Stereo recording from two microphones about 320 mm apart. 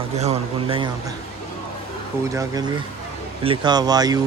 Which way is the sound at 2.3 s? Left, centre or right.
Centre.